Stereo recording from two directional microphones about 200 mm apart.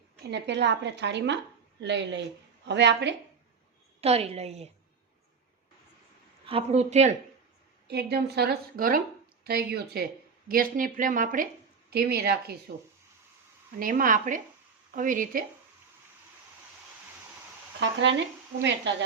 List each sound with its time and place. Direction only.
0.3 s a woman's voice: 60° right (ahead or behind)
4.0 s speech: 30° right (ahead or behind)
6.4 s speech: 30° right (ahead or behind)
7.9 s a woman's voice: 55° right (ahead or behind)
13.7 s a woman's voice: 45° right (ahead or behind)
17.8 s a woman's voice: 65° right (ahead or behind)